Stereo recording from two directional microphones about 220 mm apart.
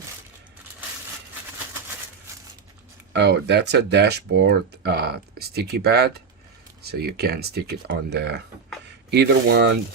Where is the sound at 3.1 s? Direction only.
50° right (ahead or behind).